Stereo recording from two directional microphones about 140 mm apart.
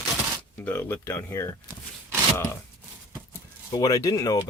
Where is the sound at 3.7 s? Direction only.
25° left (ahead or behind).